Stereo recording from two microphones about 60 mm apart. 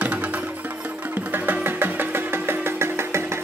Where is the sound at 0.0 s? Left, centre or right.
Right.